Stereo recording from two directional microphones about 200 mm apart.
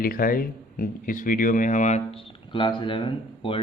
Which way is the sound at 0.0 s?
45° left (ahead or behind).